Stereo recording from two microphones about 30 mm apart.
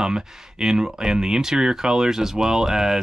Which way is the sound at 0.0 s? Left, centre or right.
Centre.